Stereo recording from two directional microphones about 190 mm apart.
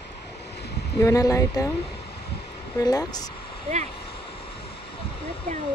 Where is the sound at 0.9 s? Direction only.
15° left (ahead or behind).